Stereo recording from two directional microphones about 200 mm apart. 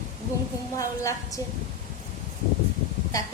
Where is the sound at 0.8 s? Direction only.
15° left (ahead or behind).